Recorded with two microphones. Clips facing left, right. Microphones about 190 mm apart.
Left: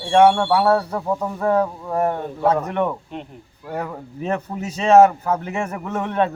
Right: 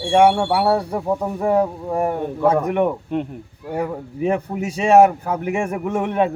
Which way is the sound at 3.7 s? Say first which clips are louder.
Right 4 dB; 10° right (ahead or behind).